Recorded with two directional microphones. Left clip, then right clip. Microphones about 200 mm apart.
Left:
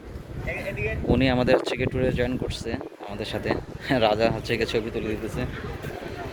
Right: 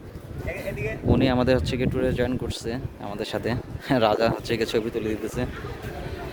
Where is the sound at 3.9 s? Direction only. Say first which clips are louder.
Even; 20° right (ahead or behind).